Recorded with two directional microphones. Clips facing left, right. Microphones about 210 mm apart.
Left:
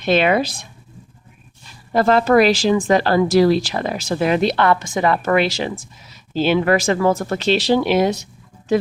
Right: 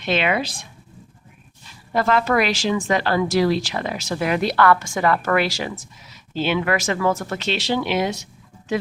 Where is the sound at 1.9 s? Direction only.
35° left (ahead or behind).